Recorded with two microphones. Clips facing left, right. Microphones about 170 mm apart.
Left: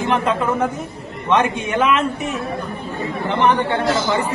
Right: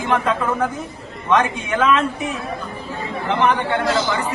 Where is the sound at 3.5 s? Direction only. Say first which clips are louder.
Left 2 dB; 25° left (ahead or behind).